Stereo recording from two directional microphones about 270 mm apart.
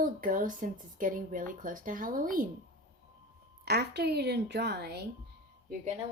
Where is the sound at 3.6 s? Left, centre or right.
Right.